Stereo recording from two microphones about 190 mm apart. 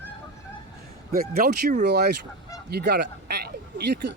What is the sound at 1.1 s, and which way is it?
Speech, 50° right (ahead or behind).